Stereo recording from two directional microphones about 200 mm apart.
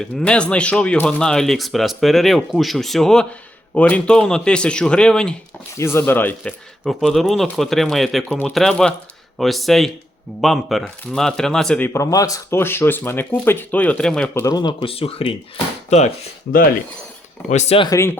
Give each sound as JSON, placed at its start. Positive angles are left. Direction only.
{"t": 0.0, "sound": "speech", "side_deg": 5}
{"t": 11.9, "sound": "speech", "side_deg": 15}
{"t": 14.4, "sound": "speech", "side_deg": 20}
{"t": 17.5, "sound": "speech", "side_deg": 35}